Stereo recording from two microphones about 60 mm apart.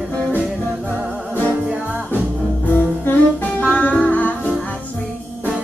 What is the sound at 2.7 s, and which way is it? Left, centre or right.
Music, left.